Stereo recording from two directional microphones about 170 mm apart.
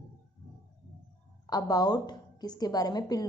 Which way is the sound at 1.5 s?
20° left (ahead or behind).